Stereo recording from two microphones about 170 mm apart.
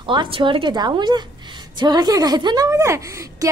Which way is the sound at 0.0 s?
30° right (ahead or behind).